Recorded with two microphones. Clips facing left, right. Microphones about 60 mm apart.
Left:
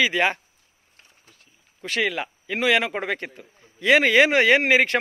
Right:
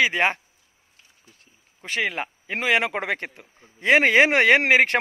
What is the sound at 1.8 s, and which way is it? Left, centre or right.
A man's voice, right.